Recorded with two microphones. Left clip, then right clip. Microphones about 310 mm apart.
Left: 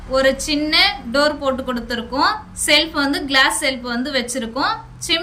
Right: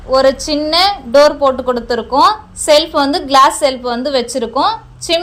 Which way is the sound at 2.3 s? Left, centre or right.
Centre.